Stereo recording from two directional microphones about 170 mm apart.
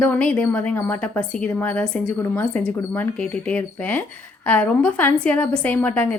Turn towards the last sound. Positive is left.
turn(degrees=10)  # may be behind; listen again after turning